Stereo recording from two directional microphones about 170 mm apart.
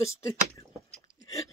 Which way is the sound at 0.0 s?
15° left (ahead or behind).